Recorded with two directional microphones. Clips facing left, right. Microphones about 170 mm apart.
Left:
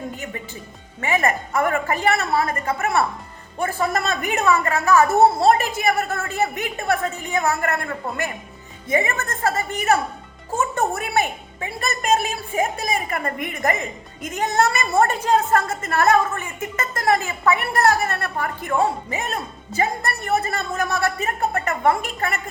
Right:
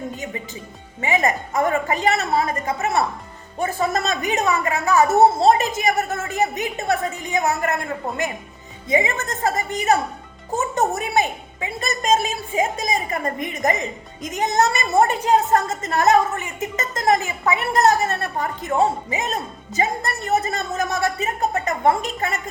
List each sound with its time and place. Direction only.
1.0 s a woman's voice: 15° right (ahead or behind)